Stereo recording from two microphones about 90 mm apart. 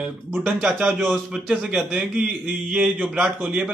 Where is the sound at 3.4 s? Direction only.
15° right (ahead or behind).